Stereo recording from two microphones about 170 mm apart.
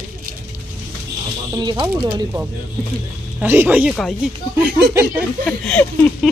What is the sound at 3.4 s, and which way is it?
Speech, 10° right (ahead or behind).